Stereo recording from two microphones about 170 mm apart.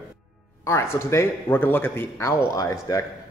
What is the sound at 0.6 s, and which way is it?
Speech, 15° left (ahead or behind).